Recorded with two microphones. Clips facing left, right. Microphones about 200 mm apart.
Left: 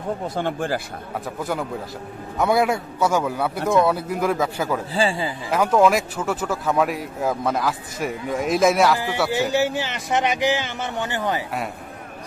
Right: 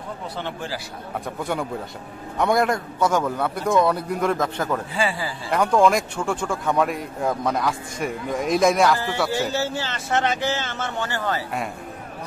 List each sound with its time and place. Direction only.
0.4 s speech: 50° left (ahead or behind)
1.4 s a man's voice: centre (ahead or behind)
4.9 s speech: 25° left (ahead or behind)
5.5 s speech: 5° left (ahead or behind)